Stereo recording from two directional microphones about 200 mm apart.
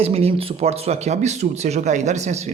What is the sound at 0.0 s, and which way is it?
Speech, 30° right (ahead or behind).